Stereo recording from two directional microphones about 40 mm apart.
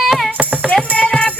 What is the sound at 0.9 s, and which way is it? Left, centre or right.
Music, left.